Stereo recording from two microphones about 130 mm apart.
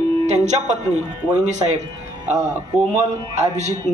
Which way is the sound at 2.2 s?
60° right (ahead or behind).